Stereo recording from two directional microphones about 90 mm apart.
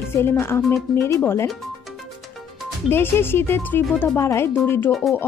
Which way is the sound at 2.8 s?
25° left (ahead or behind).